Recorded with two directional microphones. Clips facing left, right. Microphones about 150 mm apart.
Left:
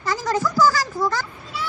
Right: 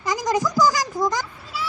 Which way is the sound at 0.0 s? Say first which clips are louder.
Right 1 dB; 15° right (ahead or behind).